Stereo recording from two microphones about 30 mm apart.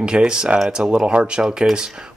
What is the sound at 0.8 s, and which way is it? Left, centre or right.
Speech, right.